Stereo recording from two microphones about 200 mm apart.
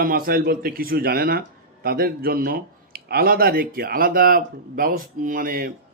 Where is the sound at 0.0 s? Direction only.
45° right (ahead or behind).